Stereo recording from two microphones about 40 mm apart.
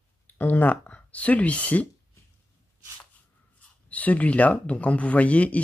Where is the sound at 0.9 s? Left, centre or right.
Left.